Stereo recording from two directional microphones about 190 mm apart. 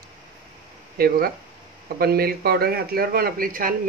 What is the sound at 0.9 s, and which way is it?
Speech, 50° right (ahead or behind).